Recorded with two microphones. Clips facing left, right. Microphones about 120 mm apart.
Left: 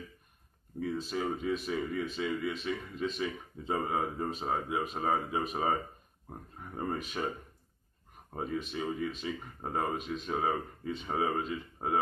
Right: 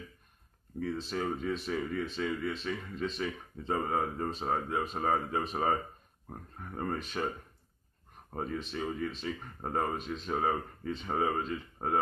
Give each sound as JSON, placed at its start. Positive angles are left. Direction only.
{"t": 0.7, "sound": "speech", "side_deg": 5}